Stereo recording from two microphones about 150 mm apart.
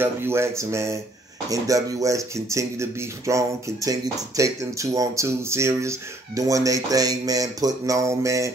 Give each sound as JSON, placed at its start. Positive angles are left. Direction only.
{"t": 0.0, "sound": "speech", "side_deg": -15}